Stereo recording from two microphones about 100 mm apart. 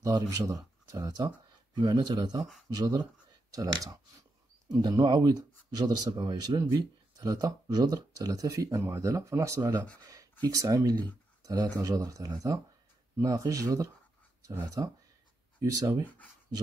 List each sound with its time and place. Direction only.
0.0 s speech: 35° right (ahead or behind)
1.8 s speech: 50° right (ahead or behind)